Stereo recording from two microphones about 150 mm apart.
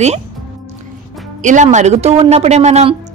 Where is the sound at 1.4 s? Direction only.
55° right (ahead or behind).